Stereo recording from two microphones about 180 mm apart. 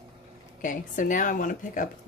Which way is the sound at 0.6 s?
45° left (ahead or behind).